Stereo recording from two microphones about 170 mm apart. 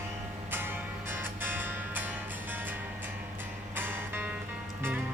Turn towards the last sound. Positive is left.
turn(degrees=-10)  # may be behind; listen again after turning